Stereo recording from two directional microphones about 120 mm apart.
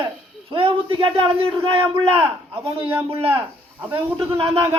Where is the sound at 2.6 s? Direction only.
55° right (ahead or behind).